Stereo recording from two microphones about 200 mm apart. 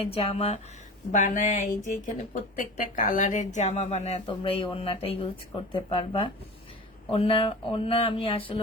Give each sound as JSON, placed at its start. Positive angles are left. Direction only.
{"t": 0.0, "sound": "speech", "side_deg": 30}